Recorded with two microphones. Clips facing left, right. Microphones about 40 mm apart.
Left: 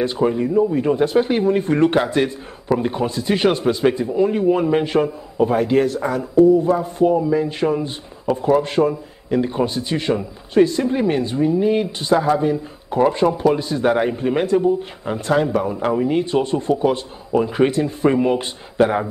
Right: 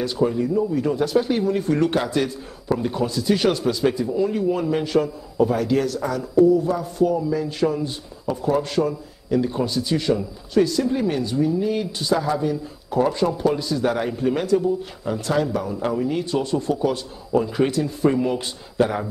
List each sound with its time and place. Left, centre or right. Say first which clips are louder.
0.0 s a man's voice: left 3 dB; left